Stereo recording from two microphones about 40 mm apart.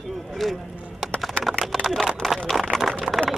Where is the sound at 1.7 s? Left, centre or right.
Centre.